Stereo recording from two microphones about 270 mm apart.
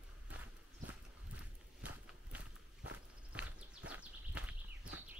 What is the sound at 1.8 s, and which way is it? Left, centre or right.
Walk, centre.